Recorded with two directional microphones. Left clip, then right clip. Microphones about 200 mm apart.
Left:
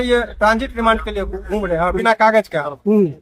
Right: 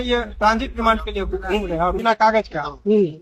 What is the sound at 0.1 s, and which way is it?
Speech, 15° left (ahead or behind).